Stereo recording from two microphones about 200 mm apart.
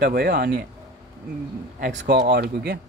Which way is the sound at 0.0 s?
50° right (ahead or behind).